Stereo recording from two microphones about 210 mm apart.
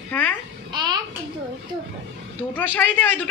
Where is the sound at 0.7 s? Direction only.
20° right (ahead or behind).